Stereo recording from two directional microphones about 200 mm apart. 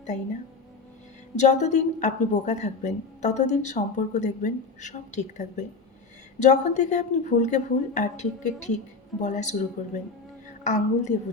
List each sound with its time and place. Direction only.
1.4 s a woman's voice: 35° left (ahead or behind)